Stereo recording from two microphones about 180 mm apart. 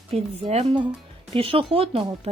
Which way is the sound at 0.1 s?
35° right (ahead or behind).